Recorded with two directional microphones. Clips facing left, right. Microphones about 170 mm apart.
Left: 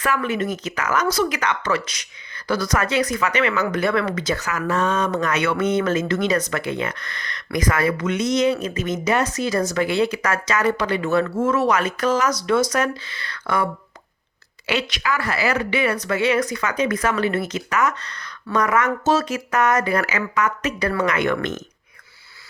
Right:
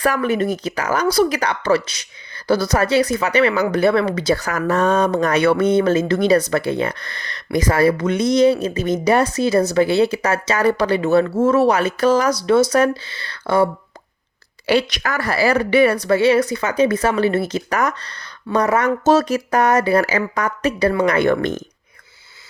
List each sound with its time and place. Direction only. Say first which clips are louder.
0.0 s a woman's voice: right 4 dB; 40° right (ahead or behind)
14.7 s a woman's voice: right 5 dB; 35° right (ahead or behind)